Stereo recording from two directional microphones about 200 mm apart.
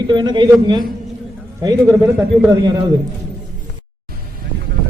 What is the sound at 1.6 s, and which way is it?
A man's voice, 15° right (ahead or behind).